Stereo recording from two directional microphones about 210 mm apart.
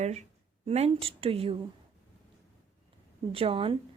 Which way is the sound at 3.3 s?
25° right (ahead or behind).